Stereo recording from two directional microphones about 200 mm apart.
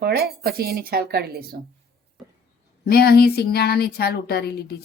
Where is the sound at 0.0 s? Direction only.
50° right (ahead or behind).